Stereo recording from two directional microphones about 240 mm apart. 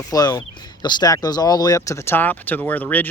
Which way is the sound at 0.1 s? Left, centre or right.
Centre.